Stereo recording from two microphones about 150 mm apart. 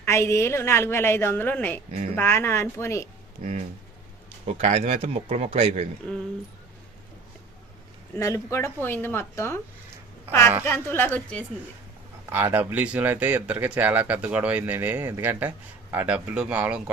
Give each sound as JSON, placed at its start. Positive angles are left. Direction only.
{"t": 0.0, "sound": "a woman's voice", "side_deg": 20}
{"t": 3.4, "sound": "speech", "side_deg": -50}
{"t": 8.1, "sound": "a woman's voice", "side_deg": 20}
{"t": 10.7, "sound": "a woman's voice", "side_deg": 15}
{"t": 12.3, "sound": "speech", "side_deg": -15}